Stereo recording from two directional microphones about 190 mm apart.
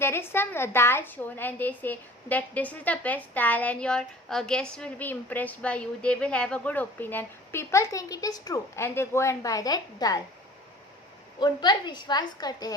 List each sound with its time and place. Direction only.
0.0 s a woman's voice: 15° left (ahead or behind)
11.3 s a woman's voice: 25° left (ahead or behind)